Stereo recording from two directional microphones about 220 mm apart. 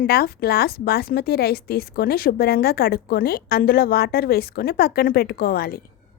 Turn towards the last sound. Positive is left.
turn(degrees=45)  # may be behind; listen again after turning